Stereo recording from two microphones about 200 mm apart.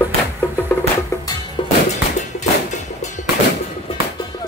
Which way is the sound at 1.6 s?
25° left (ahead or behind).